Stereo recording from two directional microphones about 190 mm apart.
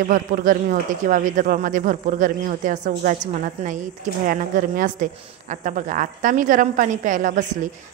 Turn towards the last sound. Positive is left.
turn(degrees=-45)  # may be behind; listen again after turning